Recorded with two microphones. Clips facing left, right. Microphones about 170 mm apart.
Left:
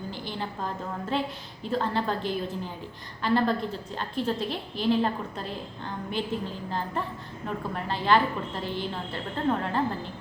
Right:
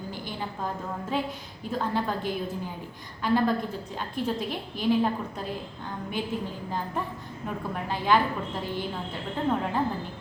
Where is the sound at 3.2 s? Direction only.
10° right (ahead or behind).